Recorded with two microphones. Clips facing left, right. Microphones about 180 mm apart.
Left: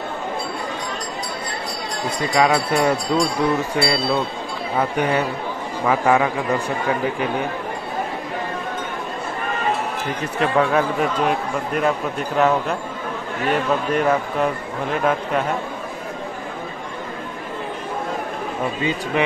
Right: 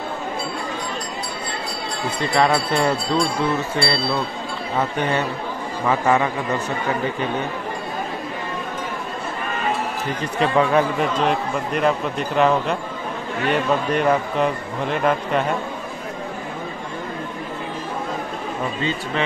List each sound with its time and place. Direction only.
2.3 s jingle bell: 10° left (ahead or behind)
10.4 s a man's voice: centre (ahead or behind)
18.8 s jingle bell: 15° left (ahead or behind)